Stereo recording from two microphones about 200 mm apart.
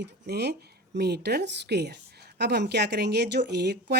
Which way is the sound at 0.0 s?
55° right (ahead or behind).